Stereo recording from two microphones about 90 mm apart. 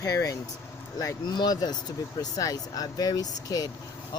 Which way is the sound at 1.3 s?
50° left (ahead or behind).